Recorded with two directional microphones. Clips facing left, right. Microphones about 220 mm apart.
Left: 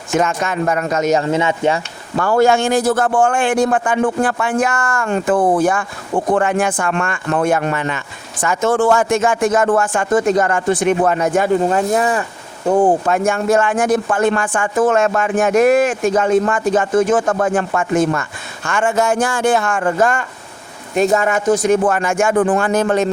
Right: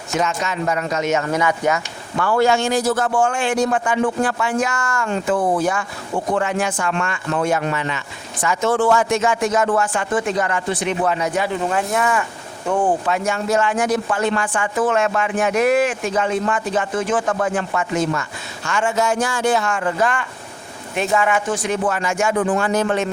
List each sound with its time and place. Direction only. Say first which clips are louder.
0.1 s a man's voice: left 4 dB; 50° left (ahead or behind)
1.2 s speech: left 3 dB; 25° left (ahead or behind)
2.1 s a man's voice: left 4 dB; 45° left (ahead or behind)